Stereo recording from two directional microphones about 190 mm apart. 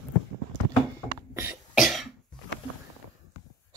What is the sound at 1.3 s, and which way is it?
Cough, 15° right (ahead or behind).